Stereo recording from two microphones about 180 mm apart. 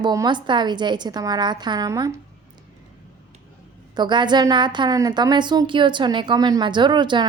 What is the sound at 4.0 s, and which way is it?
A woman's voice, 25° right (ahead or behind).